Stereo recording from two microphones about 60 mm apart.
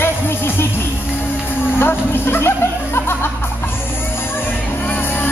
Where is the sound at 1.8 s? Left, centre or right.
Left.